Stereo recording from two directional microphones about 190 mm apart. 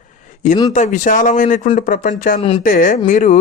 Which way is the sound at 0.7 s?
40° left (ahead or behind).